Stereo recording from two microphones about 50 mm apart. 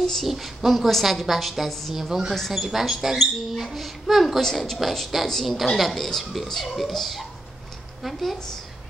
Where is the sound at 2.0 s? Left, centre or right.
Centre.